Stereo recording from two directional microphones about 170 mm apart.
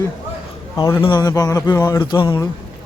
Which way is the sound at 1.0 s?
25° left (ahead or behind).